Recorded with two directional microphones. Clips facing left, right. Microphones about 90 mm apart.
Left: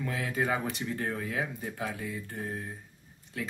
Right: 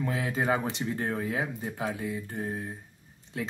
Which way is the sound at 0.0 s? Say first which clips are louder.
Right 2 dB; 20° right (ahead or behind).